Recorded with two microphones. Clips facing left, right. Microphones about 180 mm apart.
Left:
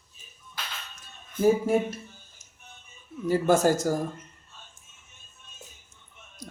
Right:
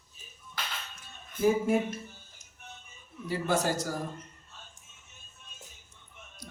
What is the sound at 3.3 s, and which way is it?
Speech, 45° left (ahead or behind).